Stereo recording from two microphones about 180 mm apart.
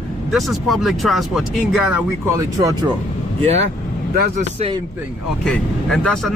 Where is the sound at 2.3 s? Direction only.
20° right (ahead or behind).